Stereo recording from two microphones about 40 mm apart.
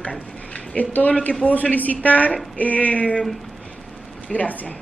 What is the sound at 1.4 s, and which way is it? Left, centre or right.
Speech, left.